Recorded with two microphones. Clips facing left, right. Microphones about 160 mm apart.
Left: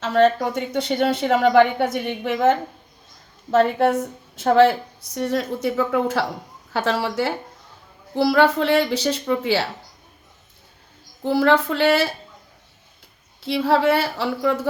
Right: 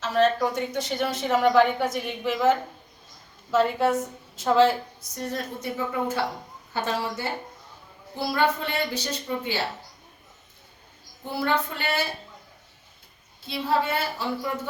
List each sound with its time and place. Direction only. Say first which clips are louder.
0.0 s a woman's voice: left 4 dB; 60° left (ahead or behind); by 9.6 s 85° left
11.2 s speech: left 9 dB; 90° left
13.4 s a woman's voice: left 7 dB; 90° left